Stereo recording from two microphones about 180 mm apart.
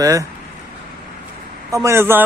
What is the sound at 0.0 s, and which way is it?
Speech, 20° right (ahead or behind).